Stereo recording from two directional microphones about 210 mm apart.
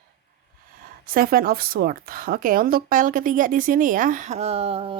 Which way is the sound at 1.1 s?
45° right (ahead or behind).